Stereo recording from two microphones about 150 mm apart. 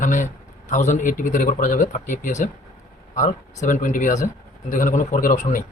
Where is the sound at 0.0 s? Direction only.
55° left (ahead or behind).